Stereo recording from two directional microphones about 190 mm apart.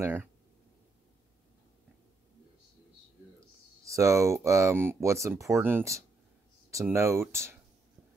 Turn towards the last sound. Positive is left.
turn(degrees=-15)  # may be behind; listen again after turning